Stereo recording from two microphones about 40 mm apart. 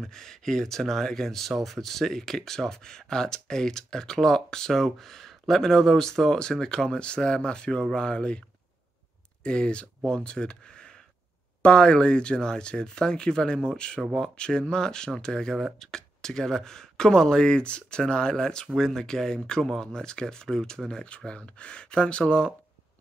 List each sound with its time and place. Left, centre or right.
0.0 s speech: centre
9.4 s speech: left
21.3 s speech: left